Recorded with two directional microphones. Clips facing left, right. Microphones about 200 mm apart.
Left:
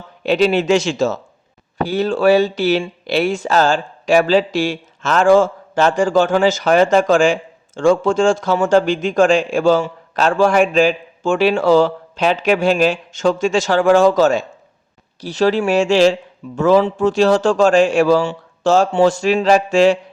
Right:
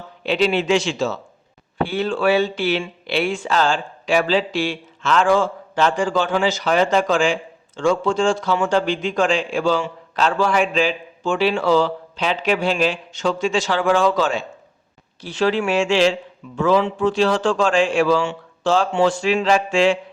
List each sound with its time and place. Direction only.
0.2 s speech: 45° left (ahead or behind)